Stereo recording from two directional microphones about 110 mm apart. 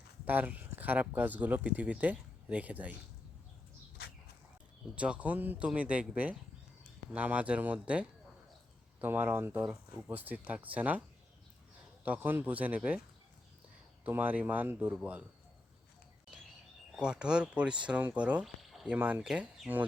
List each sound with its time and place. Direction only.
0.3 s speech: 15° right (ahead or behind)
4.9 s speech: 10° right (ahead or behind)
12.0 s speech: 15° right (ahead or behind)
14.0 s speech: 15° right (ahead or behind)
17.0 s speech: 10° right (ahead or behind)
18.4 s a sound: centre (ahead or behind)
18.9 s speech: 15° right (ahead or behind)